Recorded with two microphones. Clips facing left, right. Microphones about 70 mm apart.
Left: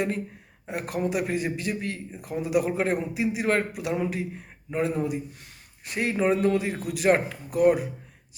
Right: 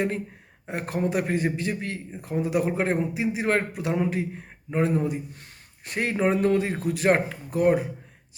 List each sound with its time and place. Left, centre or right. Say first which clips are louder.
0.7 s a man's voice: right 1 dB; right